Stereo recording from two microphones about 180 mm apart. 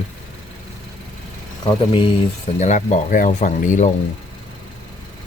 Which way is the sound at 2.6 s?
40° left (ahead or behind).